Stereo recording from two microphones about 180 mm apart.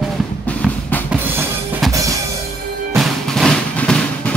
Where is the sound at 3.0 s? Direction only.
Centre (ahead or behind).